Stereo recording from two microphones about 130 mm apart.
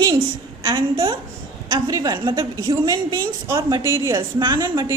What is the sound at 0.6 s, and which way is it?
A woman's voice, 40° right (ahead or behind).